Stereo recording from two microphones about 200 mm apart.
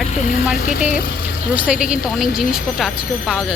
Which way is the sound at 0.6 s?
40° left (ahead or behind).